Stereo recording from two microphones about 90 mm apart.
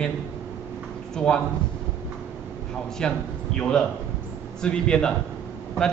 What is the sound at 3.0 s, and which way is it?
A man's voice, 10° left (ahead or behind).